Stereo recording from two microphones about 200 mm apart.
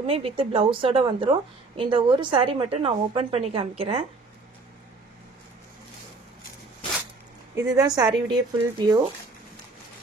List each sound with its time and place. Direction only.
0.0 s a woman's voice: 30° right (ahead or behind)
7.7 s a woman's voice: 20° right (ahead or behind)